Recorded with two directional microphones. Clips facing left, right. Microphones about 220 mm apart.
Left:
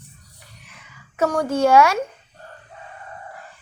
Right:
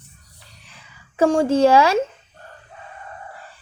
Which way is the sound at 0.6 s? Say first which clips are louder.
Left 1 dB; 30° right (ahead or behind).